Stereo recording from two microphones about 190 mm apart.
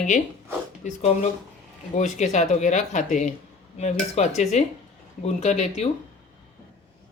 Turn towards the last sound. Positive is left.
turn(degrees=35)  # may be behind; listen again after turning